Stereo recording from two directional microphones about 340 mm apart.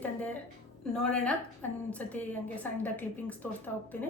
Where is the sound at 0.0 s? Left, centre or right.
Centre.